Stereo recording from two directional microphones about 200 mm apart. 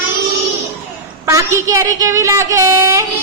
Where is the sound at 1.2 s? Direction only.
15° right (ahead or behind).